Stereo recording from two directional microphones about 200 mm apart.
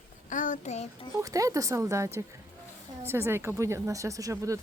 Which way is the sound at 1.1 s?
15° right (ahead or behind).